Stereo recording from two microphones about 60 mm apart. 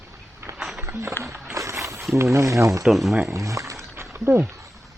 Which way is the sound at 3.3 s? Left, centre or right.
Right.